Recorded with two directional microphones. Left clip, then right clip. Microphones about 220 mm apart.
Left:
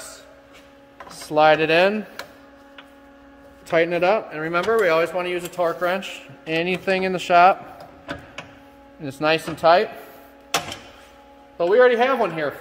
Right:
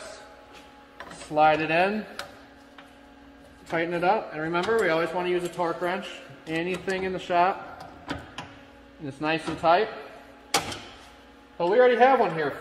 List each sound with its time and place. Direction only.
1.3 s speech: 50° left (ahead or behind)
3.7 s speech: 50° left (ahead or behind)
9.0 s speech: 55° left (ahead or behind)
11.5 s speech: 55° left (ahead or behind)